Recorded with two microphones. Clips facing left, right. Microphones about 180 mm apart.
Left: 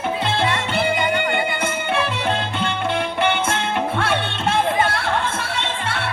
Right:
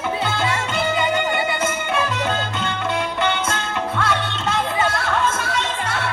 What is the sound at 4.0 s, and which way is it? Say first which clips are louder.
Music: left 1 dB; 30° left (ahead or behind).